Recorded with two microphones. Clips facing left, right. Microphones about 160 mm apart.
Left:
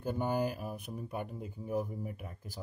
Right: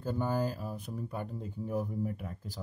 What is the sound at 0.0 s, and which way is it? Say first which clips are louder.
Speech: even; 15° left (ahead or behind).